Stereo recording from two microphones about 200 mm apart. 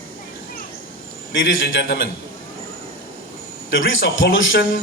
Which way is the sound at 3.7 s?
70° left (ahead or behind).